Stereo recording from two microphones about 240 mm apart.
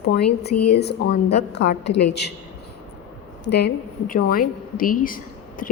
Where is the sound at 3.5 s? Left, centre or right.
Left.